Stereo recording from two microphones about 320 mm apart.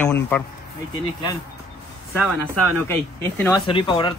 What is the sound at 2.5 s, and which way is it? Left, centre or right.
Speech, right.